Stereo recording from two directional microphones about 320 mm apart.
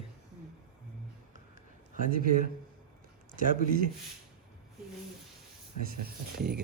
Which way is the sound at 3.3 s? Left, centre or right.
Right.